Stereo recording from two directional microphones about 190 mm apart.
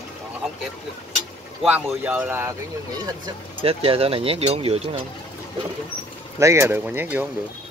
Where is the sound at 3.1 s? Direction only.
25° right (ahead or behind).